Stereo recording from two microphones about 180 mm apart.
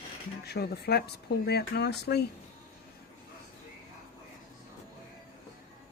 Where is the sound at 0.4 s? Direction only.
65° left (ahead or behind).